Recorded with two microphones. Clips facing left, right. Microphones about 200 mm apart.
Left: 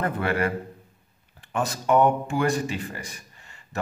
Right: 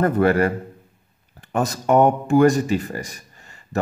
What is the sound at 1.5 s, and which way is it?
Speech, 40° right (ahead or behind).